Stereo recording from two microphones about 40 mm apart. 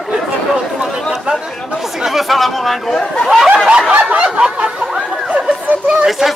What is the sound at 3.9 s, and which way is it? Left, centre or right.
Snicker, right.